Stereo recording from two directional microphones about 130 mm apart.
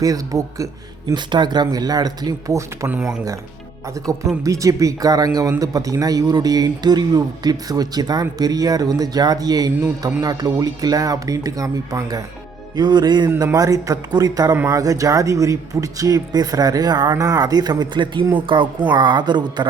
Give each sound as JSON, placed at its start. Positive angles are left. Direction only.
{"t": 0.0, "sound": "speech", "side_deg": -25}
{"t": 4.4, "sound": "speech", "side_deg": -25}